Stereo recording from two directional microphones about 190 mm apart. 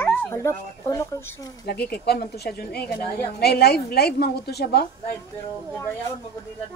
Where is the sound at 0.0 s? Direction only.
10° left (ahead or behind).